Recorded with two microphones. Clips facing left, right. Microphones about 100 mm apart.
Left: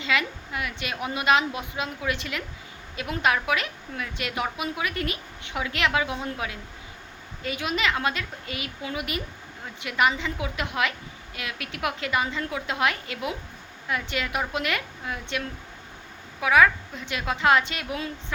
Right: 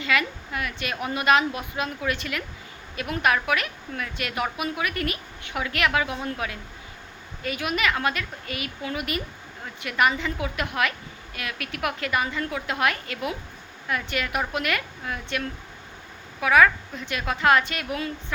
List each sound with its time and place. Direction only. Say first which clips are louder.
0.0 s a woman's voice: right 1 dB; 20° left (ahead or behind)